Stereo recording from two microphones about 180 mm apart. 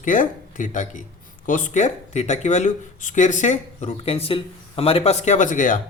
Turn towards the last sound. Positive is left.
turn(degrees=45)  # may be behind; listen again after turning